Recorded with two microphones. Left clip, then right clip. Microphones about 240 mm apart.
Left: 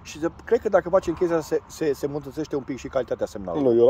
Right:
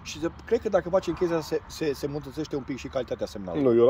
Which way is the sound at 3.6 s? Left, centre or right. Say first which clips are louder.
Left 2 dB; centre.